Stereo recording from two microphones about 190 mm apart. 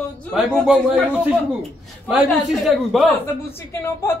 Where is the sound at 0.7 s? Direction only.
5° right (ahead or behind).